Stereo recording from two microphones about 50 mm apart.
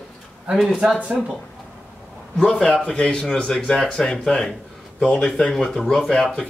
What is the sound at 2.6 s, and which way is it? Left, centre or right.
Speech, centre.